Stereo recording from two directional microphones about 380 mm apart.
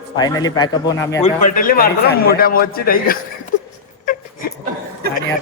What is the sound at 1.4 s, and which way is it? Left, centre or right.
A man's voice, centre.